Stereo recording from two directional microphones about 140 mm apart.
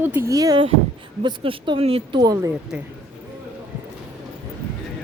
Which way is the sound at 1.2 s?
35° right (ahead or behind).